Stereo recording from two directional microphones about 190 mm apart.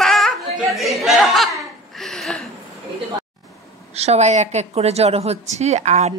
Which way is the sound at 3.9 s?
35° right (ahead or behind).